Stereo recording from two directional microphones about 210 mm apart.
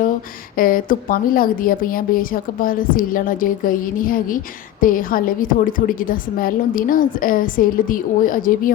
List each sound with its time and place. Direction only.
0.5 s a woman's voice: 40° left (ahead or behind)